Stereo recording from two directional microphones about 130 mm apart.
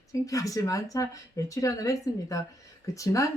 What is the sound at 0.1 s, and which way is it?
Speech, 25° left (ahead or behind).